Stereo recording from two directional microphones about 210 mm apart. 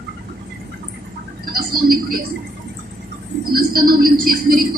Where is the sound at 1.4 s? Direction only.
45° right (ahead or behind).